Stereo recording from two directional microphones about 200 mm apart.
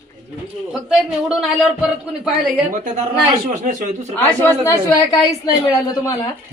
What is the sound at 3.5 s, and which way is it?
Speech, 40° right (ahead or behind).